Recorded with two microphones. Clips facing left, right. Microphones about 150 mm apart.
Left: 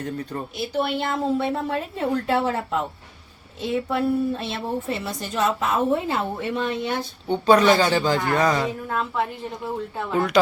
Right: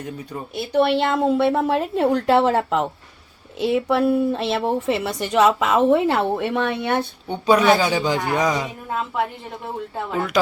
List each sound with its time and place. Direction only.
0.0 s speech: 10° right (ahead or behind)
0.7 s a woman's voice: 70° right (ahead or behind)
7.3 s speech: 10° right (ahead or behind)